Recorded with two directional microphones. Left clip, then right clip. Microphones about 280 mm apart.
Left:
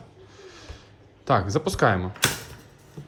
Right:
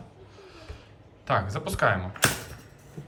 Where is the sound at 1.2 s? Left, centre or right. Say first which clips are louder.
Left 5 dB; left.